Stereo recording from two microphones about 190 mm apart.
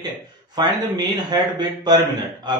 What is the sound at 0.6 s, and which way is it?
Speech, 20° right (ahead or behind).